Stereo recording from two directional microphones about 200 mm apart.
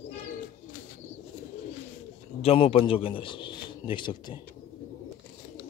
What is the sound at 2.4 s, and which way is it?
A man's voice, 30° left (ahead or behind).